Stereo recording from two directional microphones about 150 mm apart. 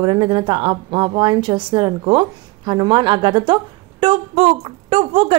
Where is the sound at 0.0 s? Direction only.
35° right (ahead or behind).